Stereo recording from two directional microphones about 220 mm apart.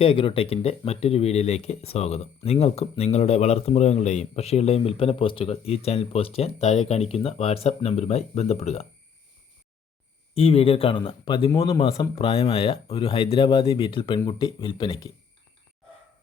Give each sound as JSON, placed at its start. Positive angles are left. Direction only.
{"t": 0.0, "sound": "speech", "side_deg": 25}
{"t": 10.3, "sound": "speech", "side_deg": 25}